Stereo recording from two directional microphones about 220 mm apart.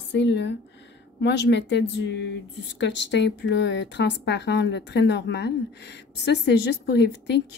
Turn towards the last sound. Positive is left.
turn(degrees=50)  # may be behind; listen again after turning